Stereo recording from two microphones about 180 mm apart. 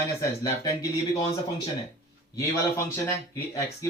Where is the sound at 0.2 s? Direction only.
20° left (ahead or behind).